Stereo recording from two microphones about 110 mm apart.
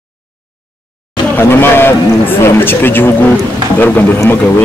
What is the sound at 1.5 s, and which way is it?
Speech, 20° left (ahead or behind).